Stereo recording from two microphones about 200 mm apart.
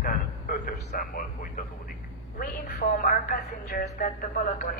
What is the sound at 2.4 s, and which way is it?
A woman's voice, 45° left (ahead or behind).